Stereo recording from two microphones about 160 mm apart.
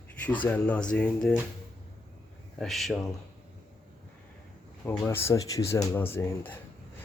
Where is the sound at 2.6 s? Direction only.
Centre (ahead or behind).